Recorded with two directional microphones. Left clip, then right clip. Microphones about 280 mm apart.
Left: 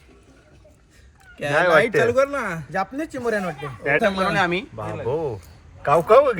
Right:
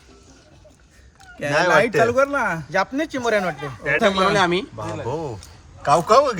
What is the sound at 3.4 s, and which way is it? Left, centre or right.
Speech, right.